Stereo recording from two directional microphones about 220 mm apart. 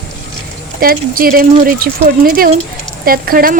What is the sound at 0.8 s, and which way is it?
A woman's voice, 40° right (ahead or behind).